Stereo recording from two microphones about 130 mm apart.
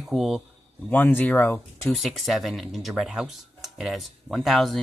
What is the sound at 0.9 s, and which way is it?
Speech, 15° left (ahead or behind).